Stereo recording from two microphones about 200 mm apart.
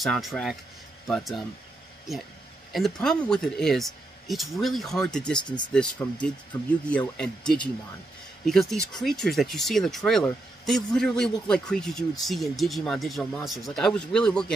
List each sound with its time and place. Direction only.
0.0 s speech: centre (ahead or behind)
2.7 s speech: centre (ahead or behind)
6.5 s speech: 20° left (ahead or behind)
6.9 s speech: 5° left (ahead or behind)